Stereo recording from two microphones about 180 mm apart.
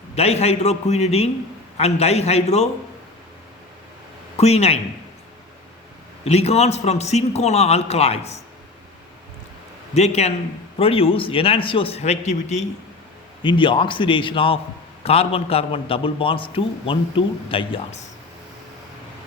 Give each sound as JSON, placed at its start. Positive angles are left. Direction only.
{"t": 0.2, "sound": "a man's voice", "side_deg": 35}
{"t": 4.4, "sound": "a man's voice", "side_deg": 35}
{"t": 6.2, "sound": "a man's voice", "side_deg": 35}
{"t": 9.9, "sound": "a man's voice", "side_deg": 35}
{"t": 13.4, "sound": "a man's voice", "side_deg": 25}